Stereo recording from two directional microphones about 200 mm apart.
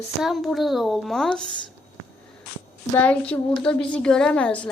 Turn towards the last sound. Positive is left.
turn(degrees=5)  # may be behind; listen again after turning